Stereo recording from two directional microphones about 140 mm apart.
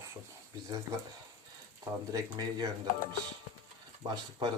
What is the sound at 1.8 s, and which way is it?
Speech, 25° right (ahead or behind).